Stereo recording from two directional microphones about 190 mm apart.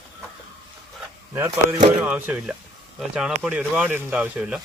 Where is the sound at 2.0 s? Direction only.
10° right (ahead or behind).